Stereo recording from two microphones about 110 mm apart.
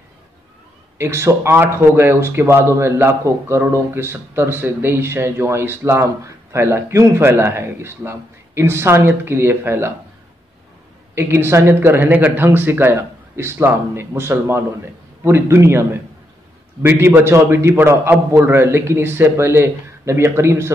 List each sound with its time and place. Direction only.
0.9 s a man's voice: 25° right (ahead or behind)
11.1 s a man's voice: 20° right (ahead or behind)